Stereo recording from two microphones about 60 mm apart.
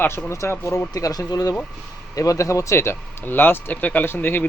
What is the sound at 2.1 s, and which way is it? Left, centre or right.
Speech, left.